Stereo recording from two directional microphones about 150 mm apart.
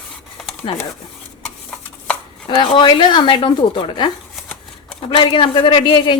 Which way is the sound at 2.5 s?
30° left (ahead or behind).